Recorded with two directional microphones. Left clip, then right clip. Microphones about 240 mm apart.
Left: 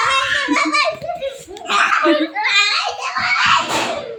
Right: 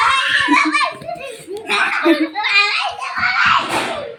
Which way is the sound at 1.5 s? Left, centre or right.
Centre.